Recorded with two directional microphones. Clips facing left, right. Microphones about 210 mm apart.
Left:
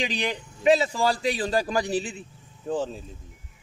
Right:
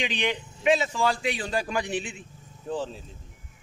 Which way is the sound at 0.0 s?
35° left (ahead or behind).